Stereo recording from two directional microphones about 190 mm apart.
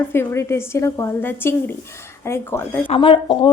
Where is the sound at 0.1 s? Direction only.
10° left (ahead or behind).